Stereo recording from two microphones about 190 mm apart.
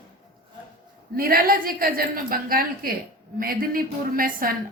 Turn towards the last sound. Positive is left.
turn(degrees=-50)  # may be behind; listen again after turning